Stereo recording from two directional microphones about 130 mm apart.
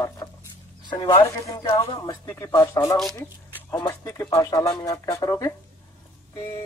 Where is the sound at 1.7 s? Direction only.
40° left (ahead or behind).